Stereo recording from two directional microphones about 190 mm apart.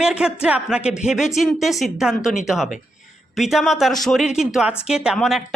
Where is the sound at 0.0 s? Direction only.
5° right (ahead or behind).